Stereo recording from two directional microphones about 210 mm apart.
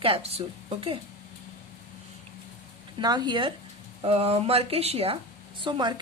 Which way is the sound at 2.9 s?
20° right (ahead or behind).